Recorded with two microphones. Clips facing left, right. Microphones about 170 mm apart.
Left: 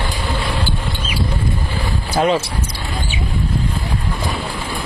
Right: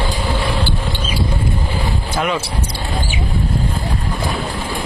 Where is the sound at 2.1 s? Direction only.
30° left (ahead or behind).